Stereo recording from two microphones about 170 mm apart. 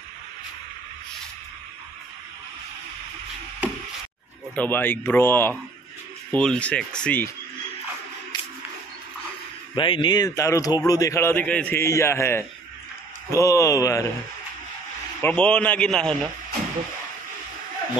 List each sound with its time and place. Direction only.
4.6 s a man's voice: 10° left (ahead or behind)
9.8 s a man's voice: 30° left (ahead or behind)
15.2 s a man's voice: 10° left (ahead or behind)